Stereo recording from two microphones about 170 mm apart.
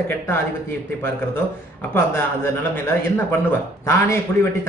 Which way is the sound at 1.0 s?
15° left (ahead or behind).